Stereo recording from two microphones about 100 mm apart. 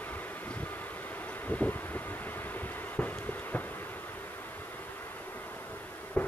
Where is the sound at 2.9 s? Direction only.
15° left (ahead or behind).